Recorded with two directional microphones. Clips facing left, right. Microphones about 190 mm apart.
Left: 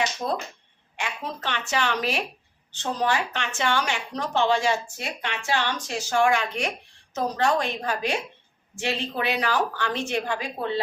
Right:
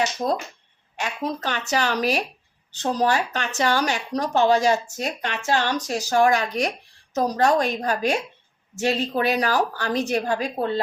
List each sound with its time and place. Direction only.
0.2 s speech: 35° right (ahead or behind)